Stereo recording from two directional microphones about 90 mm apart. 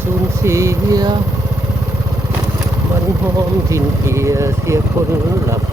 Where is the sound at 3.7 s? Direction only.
30° right (ahead or behind).